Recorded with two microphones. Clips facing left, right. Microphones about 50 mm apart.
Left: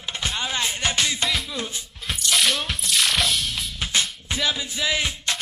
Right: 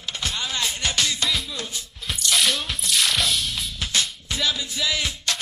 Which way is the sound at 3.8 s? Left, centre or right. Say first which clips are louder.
Left 1 dB; left.